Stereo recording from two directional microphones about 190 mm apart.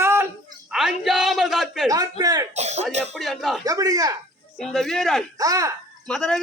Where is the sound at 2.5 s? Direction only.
35° right (ahead or behind).